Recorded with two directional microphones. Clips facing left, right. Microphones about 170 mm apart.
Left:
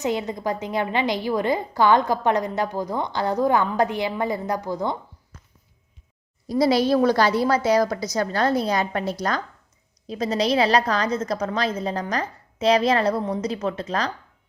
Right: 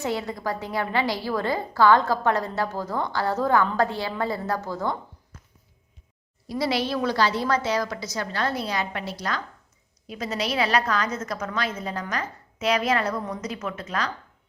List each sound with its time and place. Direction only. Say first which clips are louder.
0.0 s a woman's voice: left 3 dB; 20° left (ahead or behind)
6.5 s a woman's voice: left 7 dB; 40° left (ahead or behind)